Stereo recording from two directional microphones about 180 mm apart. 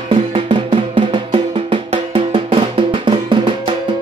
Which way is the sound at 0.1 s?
30° right (ahead or behind).